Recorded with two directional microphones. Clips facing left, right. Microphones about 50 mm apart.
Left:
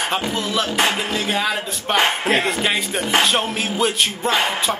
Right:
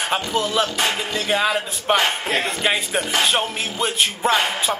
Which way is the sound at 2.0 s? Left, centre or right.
Left.